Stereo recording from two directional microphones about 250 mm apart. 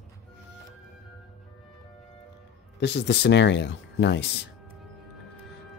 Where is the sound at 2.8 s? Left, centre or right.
Left.